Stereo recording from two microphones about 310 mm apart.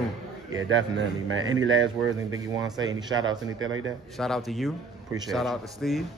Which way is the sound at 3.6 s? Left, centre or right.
Right.